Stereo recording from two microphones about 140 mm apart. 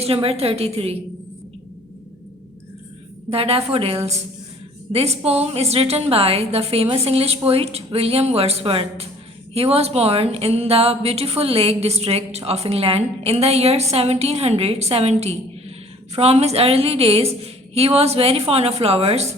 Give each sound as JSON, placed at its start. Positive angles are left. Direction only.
{"t": 0.0, "sound": "a woman's voice", "side_deg": -45}
{"t": 3.2, "sound": "a woman's voice", "side_deg": -45}